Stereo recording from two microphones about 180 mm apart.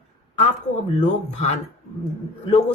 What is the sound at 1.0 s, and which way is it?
Speech, 40° left (ahead or behind).